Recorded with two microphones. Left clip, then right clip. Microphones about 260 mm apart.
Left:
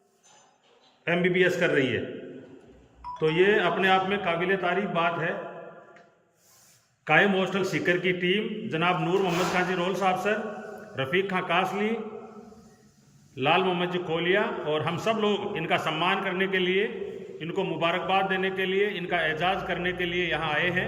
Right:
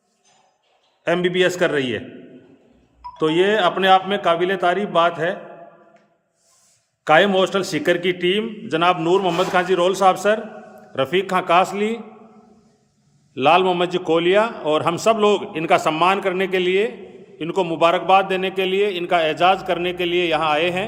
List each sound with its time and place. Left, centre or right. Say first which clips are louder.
1.1 s a man's voice: right 5 dB; right
3.2 s a man's voice: right 5 dB; right
7.1 s a man's voice: right 8 dB; right
13.3 s a man's voice: right 9 dB; right